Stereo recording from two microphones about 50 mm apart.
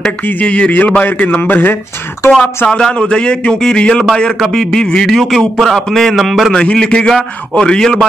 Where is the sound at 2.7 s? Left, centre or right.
Centre.